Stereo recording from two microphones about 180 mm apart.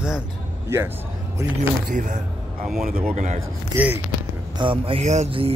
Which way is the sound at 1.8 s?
45° right (ahead or behind).